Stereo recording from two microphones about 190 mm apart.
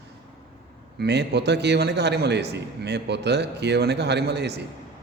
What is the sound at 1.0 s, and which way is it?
A man's voice, 60° right (ahead or behind).